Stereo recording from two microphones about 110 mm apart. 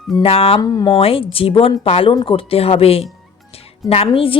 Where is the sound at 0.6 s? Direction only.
35° left (ahead or behind).